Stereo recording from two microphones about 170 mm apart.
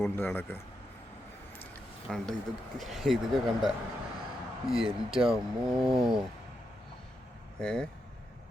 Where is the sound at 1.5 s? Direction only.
5° left (ahead or behind).